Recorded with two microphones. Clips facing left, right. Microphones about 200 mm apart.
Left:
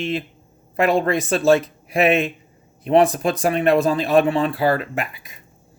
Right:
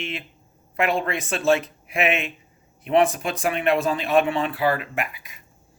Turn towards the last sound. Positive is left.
turn(degrees=35)  # may be behind; listen again after turning